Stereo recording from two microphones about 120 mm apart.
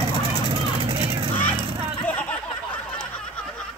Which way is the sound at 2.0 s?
10° left (ahead or behind).